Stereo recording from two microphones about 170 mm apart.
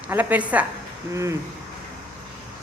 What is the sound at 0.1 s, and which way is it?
A woman's voice, 10° right (ahead or behind).